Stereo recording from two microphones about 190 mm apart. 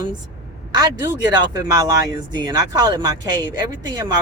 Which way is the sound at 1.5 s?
20° right (ahead or behind).